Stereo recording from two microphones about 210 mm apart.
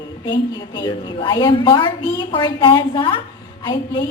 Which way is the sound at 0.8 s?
20° left (ahead or behind).